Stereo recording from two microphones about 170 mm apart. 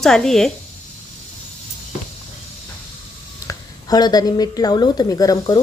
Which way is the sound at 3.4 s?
25° left (ahead or behind).